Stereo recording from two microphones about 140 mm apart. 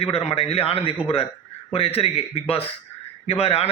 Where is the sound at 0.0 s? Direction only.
45° left (ahead or behind).